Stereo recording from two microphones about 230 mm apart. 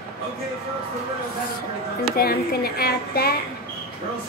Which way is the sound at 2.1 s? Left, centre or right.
Left.